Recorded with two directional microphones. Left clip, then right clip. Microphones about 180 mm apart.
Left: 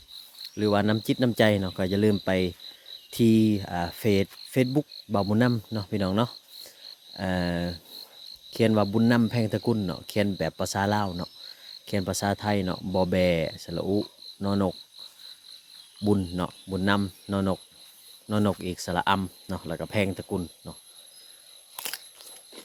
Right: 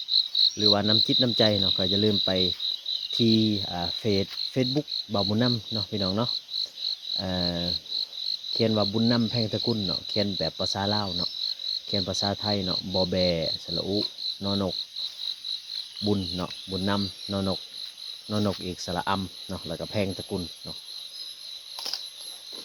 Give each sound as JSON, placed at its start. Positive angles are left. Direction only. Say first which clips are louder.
{"t": 0.6, "sound": "speech", "louder": "left 2 dB", "side_deg": 30}
{"t": 3.1, "sound": "cricket", "louder": "left 2 dB", "side_deg": 25}
{"t": 16.3, "sound": "cricket", "louder": "even", "side_deg": 35}
{"t": 18.3, "sound": "speech", "louder": "left 2 dB", "side_deg": 35}